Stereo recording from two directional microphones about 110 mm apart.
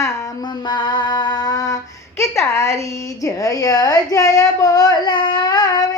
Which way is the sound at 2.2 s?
25° left (ahead or behind).